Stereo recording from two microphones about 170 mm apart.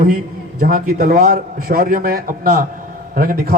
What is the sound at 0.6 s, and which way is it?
A man's voice, 50° right (ahead or behind).